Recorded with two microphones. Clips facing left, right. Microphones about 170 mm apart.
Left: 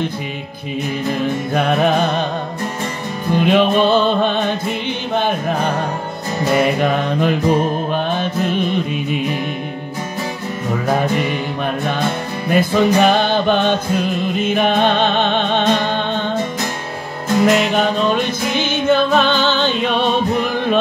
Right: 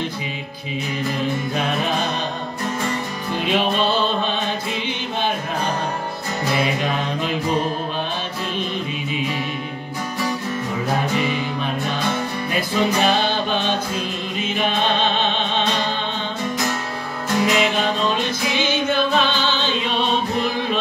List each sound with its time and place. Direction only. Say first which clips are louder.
1.5 s music: left 7 dB; 55° left (ahead or behind)
3.3 s music: left 7 dB; 55° left (ahead or behind)
6.5 s mantra: left 7 dB; 55° left (ahead or behind)
11.1 s music: left 2 dB; 55° left (ahead or behind)
17.5 s music: left 5 dB; 55° left (ahead or behind)